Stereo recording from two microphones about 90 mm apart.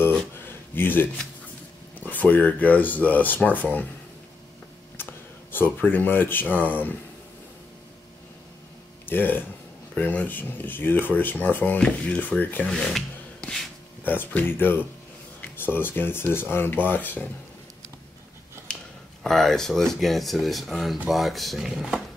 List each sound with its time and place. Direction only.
0.5 s a sound: 25° left (ahead or behind)
2.0 s speech: 20° left (ahead or behind)
5.0 s a sound: 25° left (ahead or behind)
5.5 s speech: 20° left (ahead or behind)
9.0 s speech: 20° left (ahead or behind)
12.6 s speech: 10° left (ahead or behind)
14.0 s speech: 20° left (ahead or behind)
18.7 s a sound: 10° left (ahead or behind)
19.2 s speech: 5° left (ahead or behind)